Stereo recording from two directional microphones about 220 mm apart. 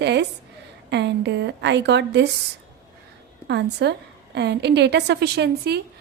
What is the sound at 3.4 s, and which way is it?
A woman's voice, 50° right (ahead or behind).